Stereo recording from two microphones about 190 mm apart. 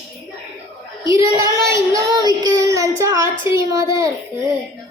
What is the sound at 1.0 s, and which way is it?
Child singing, 15° right (ahead or behind).